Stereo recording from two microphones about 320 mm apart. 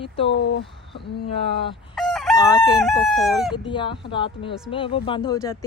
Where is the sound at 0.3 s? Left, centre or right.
Left.